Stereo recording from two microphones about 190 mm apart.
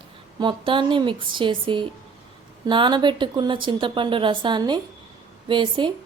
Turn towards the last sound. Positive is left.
turn(degrees=-25)  # may be behind; listen again after turning